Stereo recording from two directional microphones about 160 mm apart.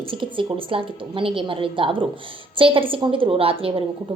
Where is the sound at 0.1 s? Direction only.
30° right (ahead or behind).